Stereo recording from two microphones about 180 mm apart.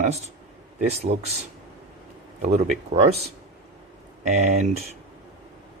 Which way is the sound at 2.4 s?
35° right (ahead or behind).